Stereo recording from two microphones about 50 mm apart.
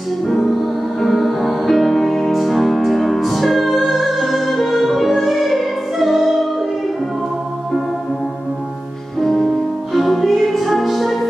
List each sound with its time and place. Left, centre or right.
0.9 s music: centre
9.2 s music: centre